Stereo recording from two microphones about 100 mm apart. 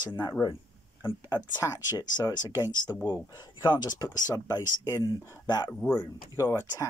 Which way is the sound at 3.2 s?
45° left (ahead or behind).